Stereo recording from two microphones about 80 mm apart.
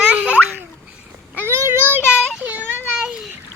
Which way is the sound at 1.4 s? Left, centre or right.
Right.